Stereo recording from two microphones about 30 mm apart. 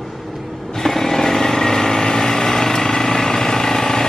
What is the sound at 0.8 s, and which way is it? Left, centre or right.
Vehicle, centre.